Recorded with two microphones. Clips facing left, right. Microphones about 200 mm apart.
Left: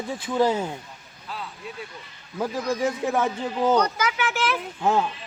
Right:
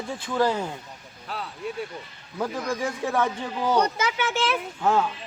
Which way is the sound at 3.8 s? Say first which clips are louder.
Even; 25° right (ahead or behind).